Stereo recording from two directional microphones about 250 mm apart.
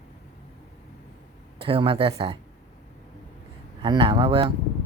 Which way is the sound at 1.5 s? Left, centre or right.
Right.